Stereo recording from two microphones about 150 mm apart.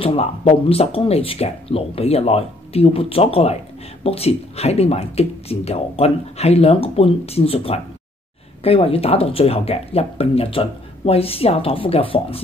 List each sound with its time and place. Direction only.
0.0 s speech: 40° left (ahead or behind)